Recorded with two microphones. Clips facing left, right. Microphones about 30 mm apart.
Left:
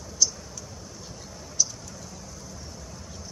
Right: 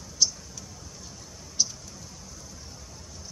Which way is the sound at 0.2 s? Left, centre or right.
Right.